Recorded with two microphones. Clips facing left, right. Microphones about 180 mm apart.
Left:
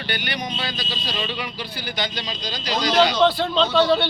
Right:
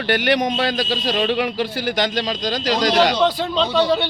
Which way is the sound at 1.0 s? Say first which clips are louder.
Right 7 dB; 50° right (ahead or behind).